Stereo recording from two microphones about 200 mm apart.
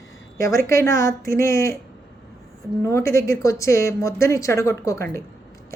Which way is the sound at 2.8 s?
15° left (ahead or behind).